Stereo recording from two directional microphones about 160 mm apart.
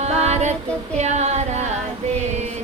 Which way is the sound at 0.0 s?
45° right (ahead or behind).